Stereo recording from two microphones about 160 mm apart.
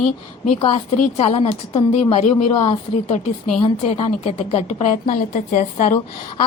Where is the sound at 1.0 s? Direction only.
40° left (ahead or behind).